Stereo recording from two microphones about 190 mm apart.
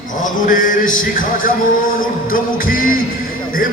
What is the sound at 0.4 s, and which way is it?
Music, 45° left (ahead or behind).